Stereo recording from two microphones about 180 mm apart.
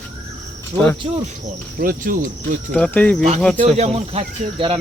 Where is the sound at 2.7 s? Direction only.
5° left (ahead or behind).